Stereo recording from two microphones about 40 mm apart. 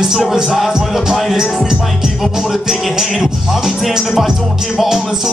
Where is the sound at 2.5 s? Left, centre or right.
Centre.